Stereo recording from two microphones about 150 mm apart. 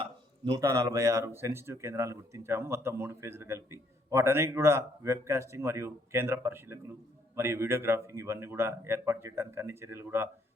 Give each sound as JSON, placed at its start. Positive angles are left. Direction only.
{"t": 0.6, "sound": "speech", "side_deg": -20}